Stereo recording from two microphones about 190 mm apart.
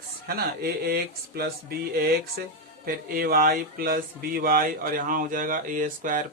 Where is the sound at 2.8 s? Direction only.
50° right (ahead or behind).